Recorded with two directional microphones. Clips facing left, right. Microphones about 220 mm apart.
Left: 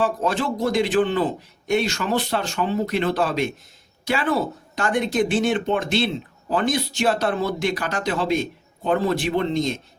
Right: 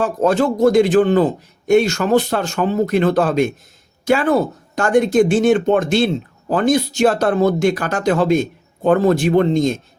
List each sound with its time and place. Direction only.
0.0 s a man's voice: 45° right (ahead or behind)